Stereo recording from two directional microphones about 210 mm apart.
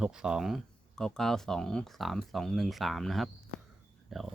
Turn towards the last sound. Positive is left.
turn(degrees=0)  # may be behind; listen again after turning